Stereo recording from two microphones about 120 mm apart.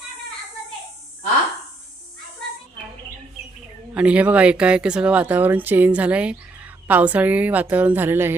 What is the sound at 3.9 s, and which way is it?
Speech, 10° right (ahead or behind).